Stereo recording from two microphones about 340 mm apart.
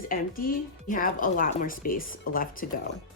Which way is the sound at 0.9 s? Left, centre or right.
Left.